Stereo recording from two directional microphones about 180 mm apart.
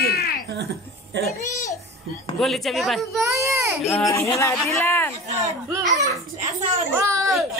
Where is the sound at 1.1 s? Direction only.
70° right (ahead or behind).